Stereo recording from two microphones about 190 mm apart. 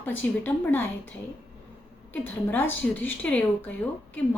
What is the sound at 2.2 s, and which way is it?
A woman's voice, 10° left (ahead or behind).